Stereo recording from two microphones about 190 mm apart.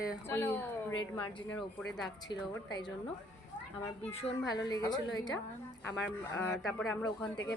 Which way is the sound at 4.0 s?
30° left (ahead or behind).